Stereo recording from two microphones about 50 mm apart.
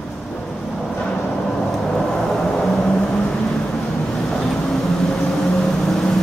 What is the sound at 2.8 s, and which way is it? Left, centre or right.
Vehicle, centre.